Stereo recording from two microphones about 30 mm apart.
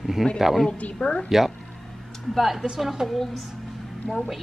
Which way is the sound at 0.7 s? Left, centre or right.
Left.